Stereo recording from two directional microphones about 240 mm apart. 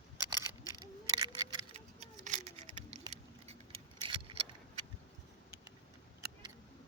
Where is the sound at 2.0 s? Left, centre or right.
Right.